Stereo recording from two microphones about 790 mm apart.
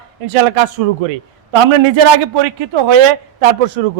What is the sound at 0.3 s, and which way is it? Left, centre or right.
Speech, right.